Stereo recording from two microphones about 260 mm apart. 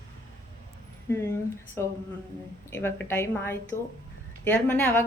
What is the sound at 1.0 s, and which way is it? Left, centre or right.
Speech, centre.